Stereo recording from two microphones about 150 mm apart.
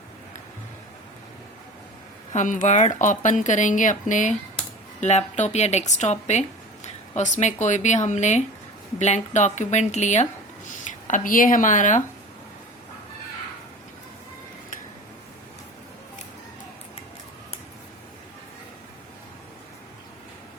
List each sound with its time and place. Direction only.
2.3 s a woman's voice: 55° left (ahead or behind)
10.8 s speech: 60° left (ahead or behind)